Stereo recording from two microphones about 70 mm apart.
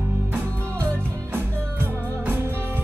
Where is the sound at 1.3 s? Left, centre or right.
Right.